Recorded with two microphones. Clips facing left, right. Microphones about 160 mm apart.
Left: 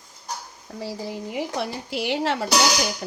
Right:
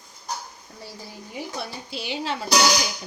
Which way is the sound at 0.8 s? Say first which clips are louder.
Left 10 dB; 90° left.